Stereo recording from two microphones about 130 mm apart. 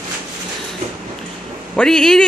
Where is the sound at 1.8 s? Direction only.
5° left (ahead or behind).